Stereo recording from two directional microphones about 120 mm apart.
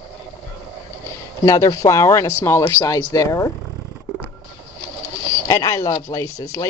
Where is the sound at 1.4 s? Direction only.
30° left (ahead or behind).